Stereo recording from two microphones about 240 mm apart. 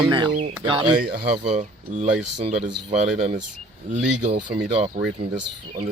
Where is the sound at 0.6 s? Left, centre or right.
Centre.